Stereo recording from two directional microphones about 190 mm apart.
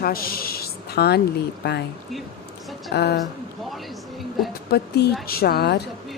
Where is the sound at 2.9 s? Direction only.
60° left (ahead or behind).